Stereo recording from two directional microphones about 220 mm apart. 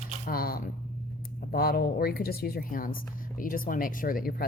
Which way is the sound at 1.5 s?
45° left (ahead or behind).